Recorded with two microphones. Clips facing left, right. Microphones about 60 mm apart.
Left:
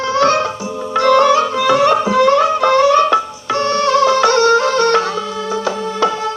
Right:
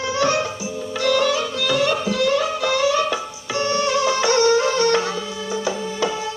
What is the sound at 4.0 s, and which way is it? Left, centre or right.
Music, left.